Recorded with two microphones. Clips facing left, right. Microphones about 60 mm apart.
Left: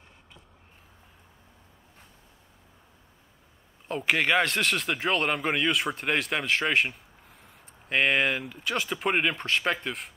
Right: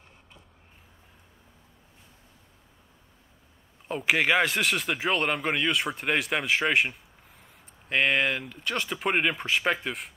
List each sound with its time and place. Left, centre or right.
3.8 s speech: centre